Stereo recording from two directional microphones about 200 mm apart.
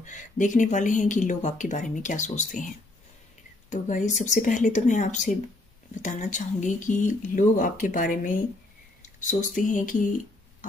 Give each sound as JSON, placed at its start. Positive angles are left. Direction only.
{"t": 0.0, "sound": "speech", "side_deg": 40}
{"t": 3.7, "sound": "speech", "side_deg": 40}